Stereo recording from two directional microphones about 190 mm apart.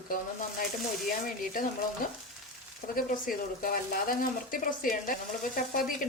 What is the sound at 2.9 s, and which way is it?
Speech, 50° left (ahead or behind).